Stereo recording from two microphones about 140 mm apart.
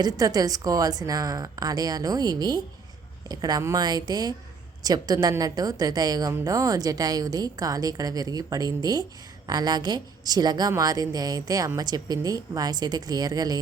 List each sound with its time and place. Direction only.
0.0 s a woman's voice: 25° right (ahead or behind)